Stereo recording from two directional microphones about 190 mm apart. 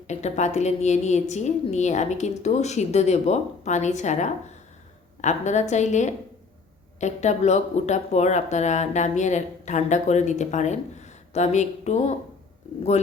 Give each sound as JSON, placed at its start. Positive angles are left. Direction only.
{"t": 0.1, "sound": "speech", "side_deg": 35}